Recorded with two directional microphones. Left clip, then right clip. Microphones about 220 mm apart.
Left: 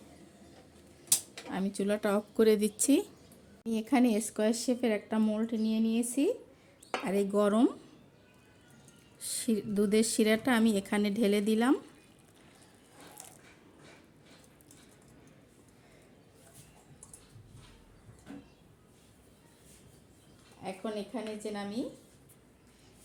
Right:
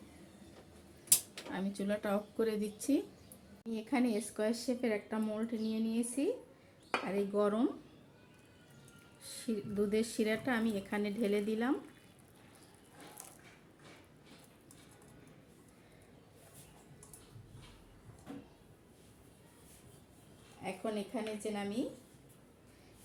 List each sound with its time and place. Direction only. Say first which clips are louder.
1.5 s speech: left 6 dB; 50° left (ahead or behind)
9.2 s speech: left 7 dB; 50° left (ahead or behind)
20.6 s a sound: left 1 dB; 25° left (ahead or behind)